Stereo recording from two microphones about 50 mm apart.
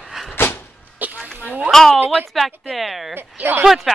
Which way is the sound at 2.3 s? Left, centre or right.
Centre.